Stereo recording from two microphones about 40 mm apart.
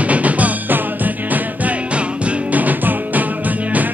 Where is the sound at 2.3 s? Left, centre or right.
Right.